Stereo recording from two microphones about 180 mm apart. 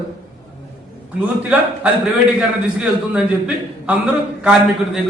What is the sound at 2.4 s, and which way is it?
A man's voice, 5° right (ahead or behind).